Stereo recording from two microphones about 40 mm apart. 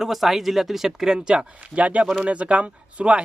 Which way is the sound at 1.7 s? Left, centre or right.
Right.